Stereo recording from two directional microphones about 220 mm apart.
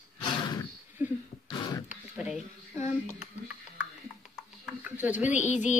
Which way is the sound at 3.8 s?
5° right (ahead or behind).